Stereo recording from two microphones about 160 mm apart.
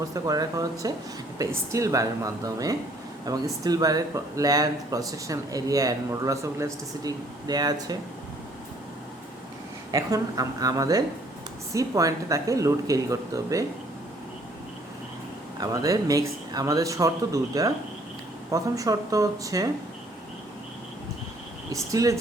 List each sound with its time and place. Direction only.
0.1 s speech: 20° right (ahead or behind)
9.9 s speech: 20° right (ahead or behind)
15.6 s speech: 20° right (ahead or behind)
21.7 s speech: 20° right (ahead or behind)